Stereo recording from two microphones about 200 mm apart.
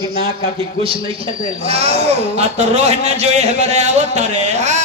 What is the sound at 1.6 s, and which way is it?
A man's voice, 30° right (ahead or behind).